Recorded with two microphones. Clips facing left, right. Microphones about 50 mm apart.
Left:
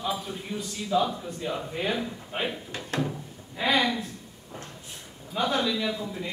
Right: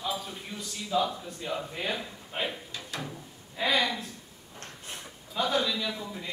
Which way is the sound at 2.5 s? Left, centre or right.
Left.